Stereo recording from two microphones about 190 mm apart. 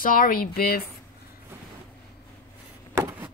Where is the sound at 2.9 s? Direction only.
15° right (ahead or behind).